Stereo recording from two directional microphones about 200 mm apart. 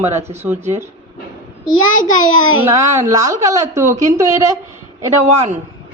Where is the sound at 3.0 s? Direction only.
15° right (ahead or behind).